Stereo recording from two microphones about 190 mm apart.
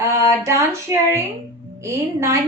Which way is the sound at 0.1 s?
15° right (ahead or behind).